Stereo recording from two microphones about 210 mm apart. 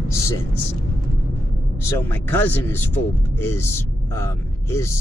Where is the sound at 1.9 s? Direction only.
10° left (ahead or behind).